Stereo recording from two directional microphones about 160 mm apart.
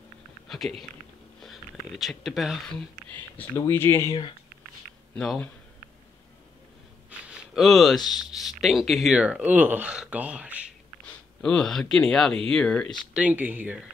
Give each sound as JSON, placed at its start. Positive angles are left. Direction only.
{"t": 0.5, "sound": "speech", "side_deg": 0}
{"t": 3.5, "sound": "speech", "side_deg": 15}
{"t": 5.1, "sound": "speech", "side_deg": 5}
{"t": 7.1, "sound": "a sound", "side_deg": -5}
{"t": 8.1, "sound": "speech", "side_deg": 0}
{"t": 11.4, "sound": "speech", "side_deg": 5}
{"t": 13.1, "sound": "speech", "side_deg": -10}